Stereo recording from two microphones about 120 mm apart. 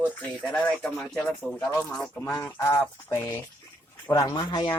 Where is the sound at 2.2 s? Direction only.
25° left (ahead or behind).